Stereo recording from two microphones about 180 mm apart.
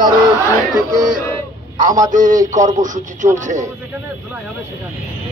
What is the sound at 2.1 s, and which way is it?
Speech, 45° right (ahead or behind).